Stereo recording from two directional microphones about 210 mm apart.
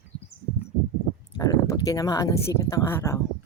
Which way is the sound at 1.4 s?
15° left (ahead or behind).